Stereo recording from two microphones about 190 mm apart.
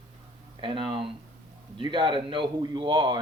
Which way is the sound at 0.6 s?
25° right (ahead or behind).